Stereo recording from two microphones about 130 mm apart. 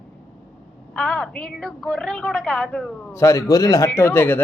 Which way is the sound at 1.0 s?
5° left (ahead or behind).